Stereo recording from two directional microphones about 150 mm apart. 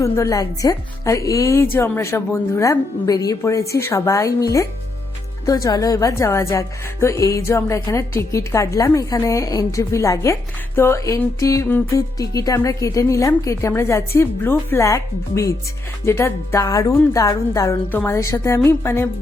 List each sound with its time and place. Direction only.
0.0 s speech: 20° left (ahead or behind)